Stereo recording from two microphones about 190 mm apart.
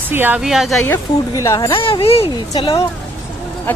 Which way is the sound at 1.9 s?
30° left (ahead or behind).